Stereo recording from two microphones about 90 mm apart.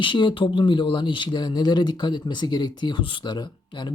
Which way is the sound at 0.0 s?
65° left (ahead or behind).